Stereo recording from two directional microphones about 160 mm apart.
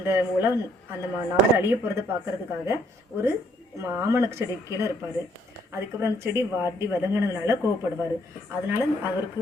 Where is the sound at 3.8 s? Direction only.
15° right (ahead or behind).